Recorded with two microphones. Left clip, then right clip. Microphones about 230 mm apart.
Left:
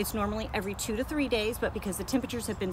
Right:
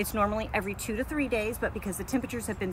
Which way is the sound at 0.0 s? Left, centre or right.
Centre.